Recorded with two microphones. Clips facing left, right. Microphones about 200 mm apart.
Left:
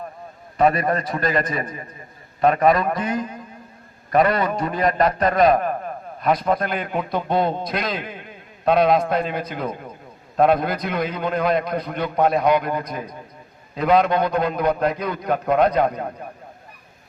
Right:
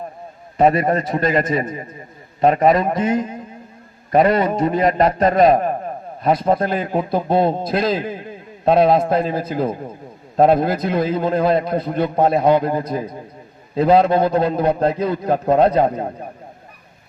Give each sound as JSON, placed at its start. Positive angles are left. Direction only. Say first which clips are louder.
{"t": 0.5, "sound": "a man's voice", "louder": "right 3 dB", "side_deg": -25}